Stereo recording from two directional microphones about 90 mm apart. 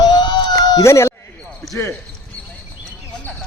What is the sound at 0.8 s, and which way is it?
Speech, 30° left (ahead or behind).